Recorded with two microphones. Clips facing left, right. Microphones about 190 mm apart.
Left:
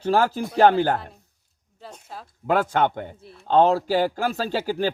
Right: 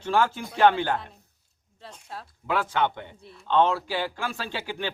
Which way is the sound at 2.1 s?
Centre (ahead or behind).